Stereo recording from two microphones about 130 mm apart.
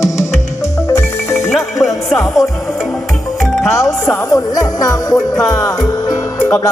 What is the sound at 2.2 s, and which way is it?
Music, centre (ahead or behind).